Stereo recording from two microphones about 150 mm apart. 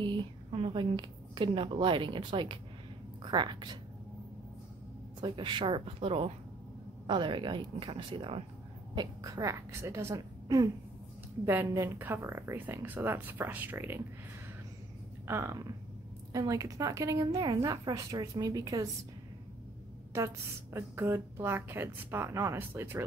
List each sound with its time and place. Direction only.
0.0 s a woman's voice: 30° right (ahead or behind)
5.2 s speech: 30° right (ahead or behind)
8.9 s a woman's voice: 25° right (ahead or behind)
15.2 s a woman's voice: 20° right (ahead or behind)
20.1 s a woman's voice: 20° right (ahead or behind)